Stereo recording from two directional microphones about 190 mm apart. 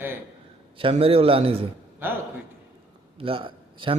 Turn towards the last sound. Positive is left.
turn(degrees=-25)  # may be behind; listen again after turning